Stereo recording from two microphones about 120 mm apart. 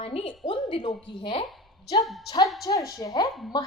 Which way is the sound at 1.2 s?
50° left (ahead or behind).